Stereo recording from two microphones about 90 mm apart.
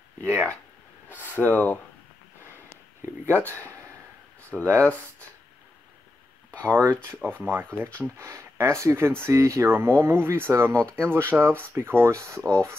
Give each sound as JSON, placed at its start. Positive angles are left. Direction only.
{"t": 0.2, "sound": "speech", "side_deg": -30}
{"t": 1.0, "sound": "a sound", "side_deg": -20}
{"t": 1.3, "sound": "speech", "side_deg": 20}
{"t": 3.3, "sound": "speech", "side_deg": -25}
{"t": 4.5, "sound": "speech", "side_deg": -5}
{"t": 6.6, "sound": "speech", "side_deg": -30}